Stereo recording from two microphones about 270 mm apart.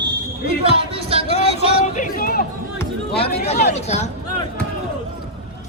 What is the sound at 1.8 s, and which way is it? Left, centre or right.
Speech, left.